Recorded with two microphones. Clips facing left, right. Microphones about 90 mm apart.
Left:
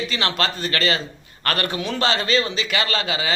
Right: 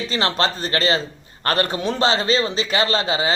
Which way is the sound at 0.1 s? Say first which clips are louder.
Right 3 dB; 35° right (ahead or behind).